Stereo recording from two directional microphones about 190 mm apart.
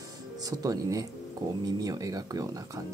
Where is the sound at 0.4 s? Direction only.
20° right (ahead or behind).